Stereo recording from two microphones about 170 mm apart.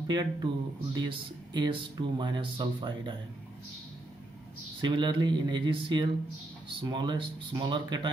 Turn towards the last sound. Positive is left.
turn(degrees=-25)  # may be behind; listen again after turning